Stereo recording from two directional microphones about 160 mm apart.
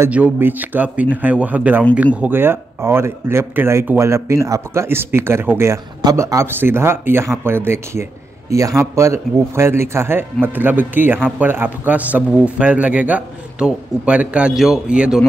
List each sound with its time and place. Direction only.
0.0 s speech: 10° right (ahead or behind)